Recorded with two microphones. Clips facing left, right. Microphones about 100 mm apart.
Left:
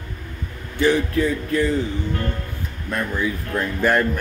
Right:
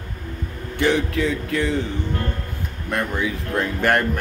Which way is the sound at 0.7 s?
75° right (ahead or behind).